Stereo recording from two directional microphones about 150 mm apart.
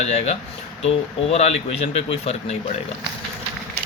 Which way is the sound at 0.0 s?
50° left (ahead or behind).